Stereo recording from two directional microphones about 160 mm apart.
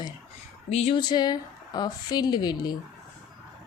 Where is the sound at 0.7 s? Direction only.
40° left (ahead or behind).